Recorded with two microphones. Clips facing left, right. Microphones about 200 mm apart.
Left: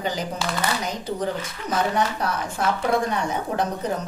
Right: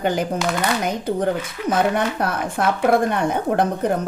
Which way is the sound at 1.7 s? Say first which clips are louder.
Right 4 dB; 55° right (ahead or behind).